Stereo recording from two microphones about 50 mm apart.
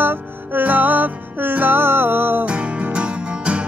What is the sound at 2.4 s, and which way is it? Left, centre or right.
Music, right.